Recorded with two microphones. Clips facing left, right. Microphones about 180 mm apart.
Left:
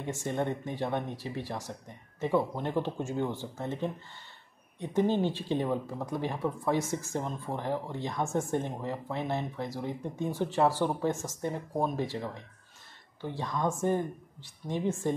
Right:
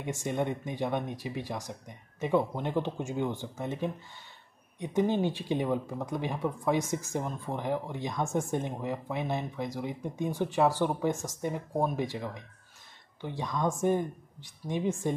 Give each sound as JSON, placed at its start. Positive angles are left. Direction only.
{"t": 0.0, "sound": "speech", "side_deg": -15}
{"t": 13.2, "sound": "speech", "side_deg": -15}